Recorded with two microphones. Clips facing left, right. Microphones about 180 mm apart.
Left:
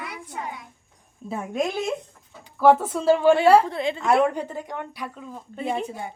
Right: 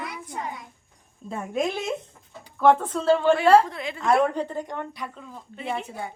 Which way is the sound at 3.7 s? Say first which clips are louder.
Left 6 dB; 25° left (ahead or behind).